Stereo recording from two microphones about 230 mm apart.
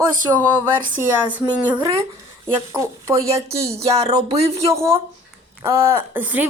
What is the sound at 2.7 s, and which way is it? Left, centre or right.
Speech, centre.